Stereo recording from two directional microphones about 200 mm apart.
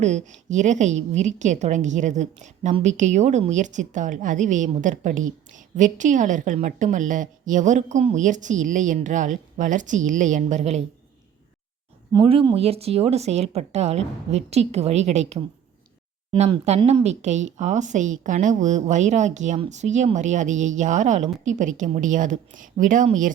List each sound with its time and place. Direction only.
0.0 s a woman's voice: 35° right (ahead or behind)
12.1 s a woman's voice: 25° right (ahead or behind); by 23.3 s 40° right (ahead or behind)